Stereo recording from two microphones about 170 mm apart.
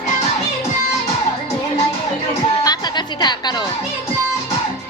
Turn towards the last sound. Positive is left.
turn(degrees=25)  # may be behind; listen again after turning